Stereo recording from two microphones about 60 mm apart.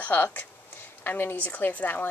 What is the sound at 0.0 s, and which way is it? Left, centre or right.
A woman's voice, left.